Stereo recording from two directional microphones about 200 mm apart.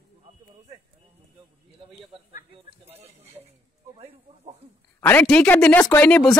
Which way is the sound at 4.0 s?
30° right (ahead or behind).